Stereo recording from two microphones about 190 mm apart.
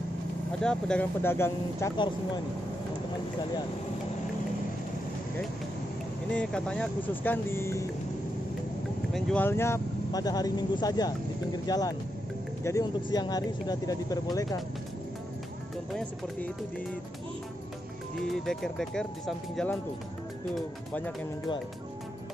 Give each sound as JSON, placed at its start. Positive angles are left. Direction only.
{"t": 0.6, "sound": "speech", "side_deg": 5}
{"t": 6.3, "sound": "speech", "side_deg": 5}
{"t": 9.1, "sound": "speech", "side_deg": 10}
{"t": 15.9, "sound": "speech", "side_deg": 5}
{"t": 18.3, "sound": "speech", "side_deg": 0}